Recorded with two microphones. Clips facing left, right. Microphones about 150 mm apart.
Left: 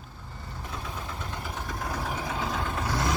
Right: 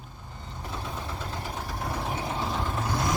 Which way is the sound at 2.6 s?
Centre (ahead or behind).